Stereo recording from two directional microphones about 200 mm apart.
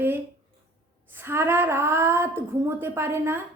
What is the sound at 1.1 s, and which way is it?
A woman's voice, 10° right (ahead or behind).